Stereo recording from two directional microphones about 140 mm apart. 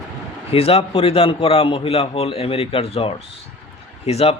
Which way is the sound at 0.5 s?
45° left (ahead or behind).